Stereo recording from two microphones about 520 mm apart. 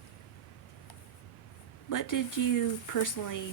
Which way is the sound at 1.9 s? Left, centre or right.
Left.